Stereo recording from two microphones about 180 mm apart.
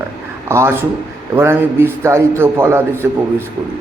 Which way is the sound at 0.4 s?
15° right (ahead or behind).